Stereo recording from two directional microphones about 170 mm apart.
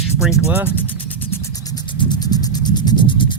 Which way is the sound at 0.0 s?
5° right (ahead or behind).